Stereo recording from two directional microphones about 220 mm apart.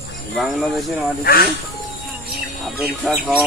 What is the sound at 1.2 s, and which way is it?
Speech, 45° left (ahead or behind).